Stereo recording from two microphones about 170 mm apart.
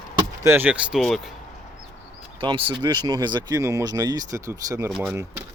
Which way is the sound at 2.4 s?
30° right (ahead or behind).